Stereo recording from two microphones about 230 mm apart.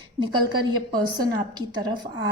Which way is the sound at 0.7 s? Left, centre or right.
Centre.